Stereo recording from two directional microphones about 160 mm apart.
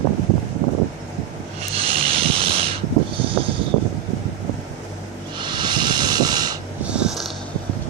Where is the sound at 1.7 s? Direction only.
35° right (ahead or behind).